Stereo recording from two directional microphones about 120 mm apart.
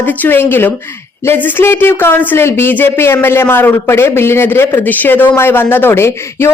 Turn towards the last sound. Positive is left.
turn(degrees=20)  # may be behind; listen again after turning